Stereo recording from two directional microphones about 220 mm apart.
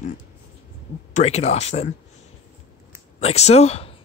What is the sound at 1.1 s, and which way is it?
Speech, 30° left (ahead or behind).